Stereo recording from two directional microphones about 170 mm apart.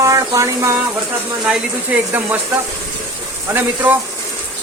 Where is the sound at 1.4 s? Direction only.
5° right (ahead or behind).